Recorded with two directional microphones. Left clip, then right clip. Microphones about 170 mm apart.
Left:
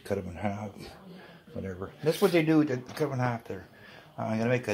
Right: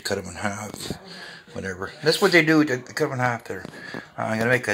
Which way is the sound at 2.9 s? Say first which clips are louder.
Right 7 dB; centre (ahead or behind).